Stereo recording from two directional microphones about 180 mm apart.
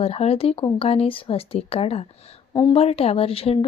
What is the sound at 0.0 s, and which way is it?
A woman's voice, 35° left (ahead or behind).